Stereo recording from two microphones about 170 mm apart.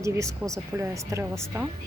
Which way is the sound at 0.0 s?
20° right (ahead or behind).